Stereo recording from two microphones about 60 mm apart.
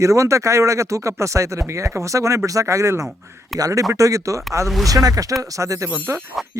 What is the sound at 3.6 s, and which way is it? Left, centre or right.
Speech, right.